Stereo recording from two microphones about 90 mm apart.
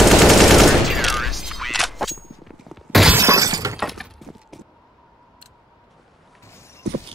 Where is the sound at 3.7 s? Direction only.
Centre (ahead or behind).